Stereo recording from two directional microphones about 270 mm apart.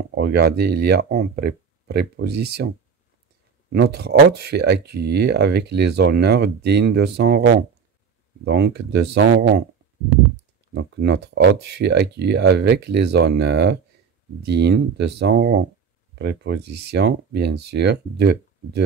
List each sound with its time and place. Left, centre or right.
0.1 s speech: right
3.7 s speech: right
10.7 s speech: right